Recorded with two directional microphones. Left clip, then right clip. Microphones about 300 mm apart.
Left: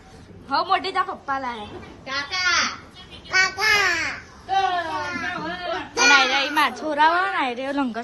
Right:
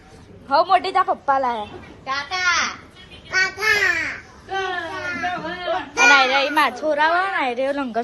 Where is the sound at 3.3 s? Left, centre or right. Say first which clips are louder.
Even; centre.